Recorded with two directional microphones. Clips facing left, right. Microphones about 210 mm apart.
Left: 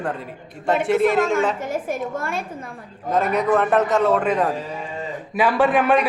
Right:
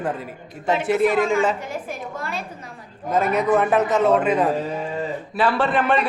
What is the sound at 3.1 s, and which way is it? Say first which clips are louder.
A man's voice: even; centre (ahead or behind).